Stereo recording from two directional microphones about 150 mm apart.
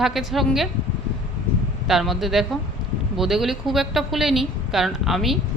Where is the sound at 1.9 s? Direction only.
Centre (ahead or behind).